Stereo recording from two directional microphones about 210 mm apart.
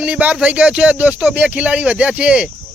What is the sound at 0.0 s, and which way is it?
Speech, 5° right (ahead or behind).